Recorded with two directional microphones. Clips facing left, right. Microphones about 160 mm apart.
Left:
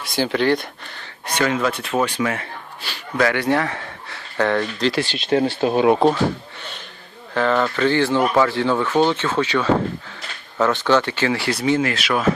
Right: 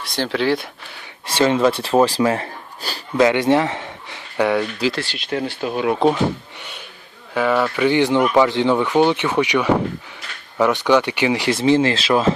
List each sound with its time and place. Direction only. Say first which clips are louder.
0.0 s speech: left 1 dB; centre (ahead or behind)
1.4 s speech: right 5 dB; 25° right (ahead or behind)
3.2 s speech: right 4 dB; 20° right (ahead or behind)
4.9 s speech: left 5 dB; 25° left (ahead or behind)
7.3 s speech: right 1 dB; 10° right (ahead or behind); by 12.3 s 30° right (ahead or behind)